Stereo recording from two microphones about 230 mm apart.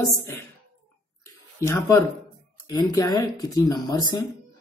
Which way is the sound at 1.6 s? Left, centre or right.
Centre.